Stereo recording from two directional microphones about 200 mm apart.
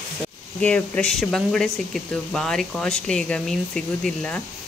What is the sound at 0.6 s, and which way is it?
Speech, 5° left (ahead or behind).